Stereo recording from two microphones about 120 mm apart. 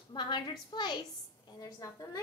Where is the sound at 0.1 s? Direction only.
40° left (ahead or behind).